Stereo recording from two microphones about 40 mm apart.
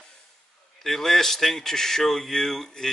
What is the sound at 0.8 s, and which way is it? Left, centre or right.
Speech, centre.